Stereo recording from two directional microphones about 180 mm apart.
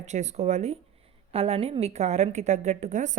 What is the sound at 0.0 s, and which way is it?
A woman's voice, 40° right (ahead or behind).